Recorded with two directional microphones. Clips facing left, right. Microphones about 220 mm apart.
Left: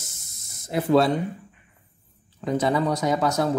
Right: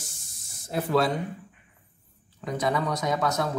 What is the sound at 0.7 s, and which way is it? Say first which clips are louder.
Speech: left 5 dB; 25° left (ahead or behind).